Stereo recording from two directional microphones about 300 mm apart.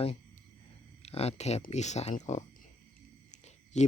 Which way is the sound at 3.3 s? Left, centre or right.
Left.